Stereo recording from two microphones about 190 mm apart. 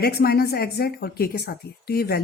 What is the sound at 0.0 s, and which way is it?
A woman's voice, 55° left (ahead or behind).